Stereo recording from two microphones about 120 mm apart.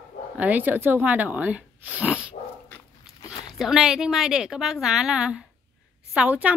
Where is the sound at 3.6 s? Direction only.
5° right (ahead or behind).